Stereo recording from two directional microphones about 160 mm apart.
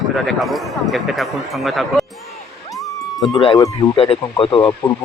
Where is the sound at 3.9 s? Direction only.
35° left (ahead or behind).